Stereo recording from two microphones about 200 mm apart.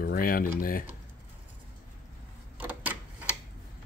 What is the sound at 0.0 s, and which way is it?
Speech, 45° left (ahead or behind).